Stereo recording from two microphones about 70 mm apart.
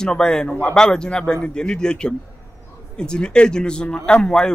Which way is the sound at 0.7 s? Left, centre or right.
Centre.